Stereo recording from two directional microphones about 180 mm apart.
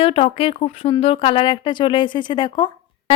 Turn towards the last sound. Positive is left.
turn(degrees=25)  # may be behind; listen again after turning